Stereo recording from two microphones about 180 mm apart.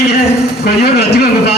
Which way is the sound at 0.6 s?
60° left (ahead or behind).